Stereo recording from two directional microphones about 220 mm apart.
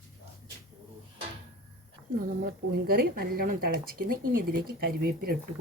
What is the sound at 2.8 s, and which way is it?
Speech, 45° right (ahead or behind).